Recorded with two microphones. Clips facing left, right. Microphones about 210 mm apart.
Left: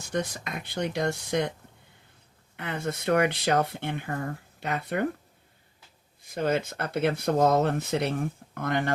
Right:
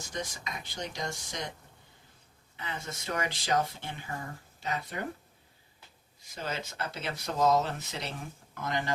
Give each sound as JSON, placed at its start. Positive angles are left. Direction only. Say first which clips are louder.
{"t": 0.1, "sound": "speech", "louder": "left 8 dB", "side_deg": 60}
{"t": 2.6, "sound": "speech", "louder": "left 8 dB", "side_deg": 60}
{"t": 6.2, "sound": "speech", "louder": "left 11 dB", "side_deg": 55}